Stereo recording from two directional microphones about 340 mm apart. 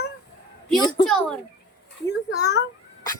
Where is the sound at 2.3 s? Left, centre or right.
Left.